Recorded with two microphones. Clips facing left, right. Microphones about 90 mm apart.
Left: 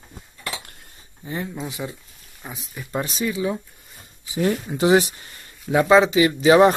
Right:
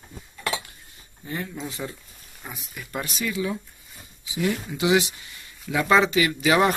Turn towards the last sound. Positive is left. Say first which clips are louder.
# left 6 dB
turn(degrees=30)  # may be behind; listen again after turning